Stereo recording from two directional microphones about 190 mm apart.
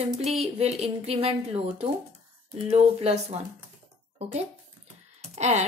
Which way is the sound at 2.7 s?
35° right (ahead or behind).